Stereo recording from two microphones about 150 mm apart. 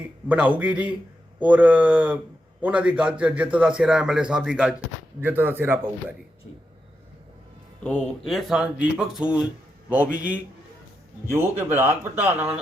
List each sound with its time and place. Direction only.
0.3 s a man's voice: 10° right (ahead or behind)
7.9 s a man's voice: 5° left (ahead or behind); by 12.5 s 10° right (ahead or behind)